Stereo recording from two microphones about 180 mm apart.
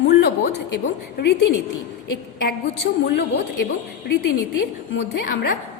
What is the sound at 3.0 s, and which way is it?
Speech, 70° left (ahead or behind).